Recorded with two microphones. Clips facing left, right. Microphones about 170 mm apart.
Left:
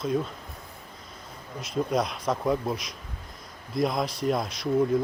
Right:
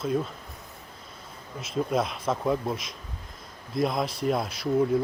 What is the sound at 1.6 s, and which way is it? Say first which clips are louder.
Speech: even; centre (ahead or behind).